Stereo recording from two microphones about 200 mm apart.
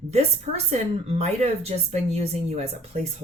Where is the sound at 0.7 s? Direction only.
35° right (ahead or behind).